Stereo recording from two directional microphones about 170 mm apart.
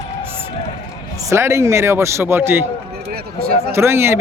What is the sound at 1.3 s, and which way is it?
A man's voice, 15° right (ahead or behind).